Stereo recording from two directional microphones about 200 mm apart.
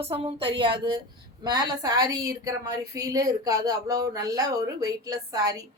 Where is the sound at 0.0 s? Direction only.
30° right (ahead or behind).